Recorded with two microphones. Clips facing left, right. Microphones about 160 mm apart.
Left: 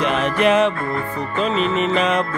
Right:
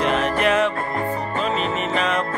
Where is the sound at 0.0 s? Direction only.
20° left (ahead or behind).